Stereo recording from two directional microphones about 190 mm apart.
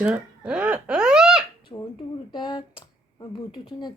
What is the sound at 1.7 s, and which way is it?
Speech, 20° left (ahead or behind).